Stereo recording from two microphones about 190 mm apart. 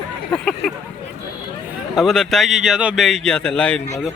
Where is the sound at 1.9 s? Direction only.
Centre (ahead or behind).